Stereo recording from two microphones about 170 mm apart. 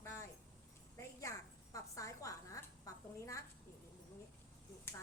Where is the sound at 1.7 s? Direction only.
20° left (ahead or behind).